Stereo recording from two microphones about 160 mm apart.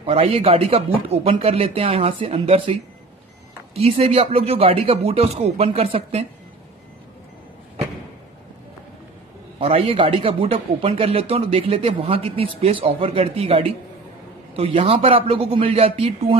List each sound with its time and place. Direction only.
0.0 s speech: 40° right (ahead or behind)
9.6 s speech: 40° right (ahead or behind)